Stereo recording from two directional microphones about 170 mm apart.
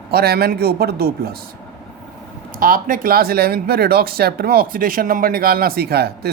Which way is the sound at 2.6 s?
55° right (ahead or behind).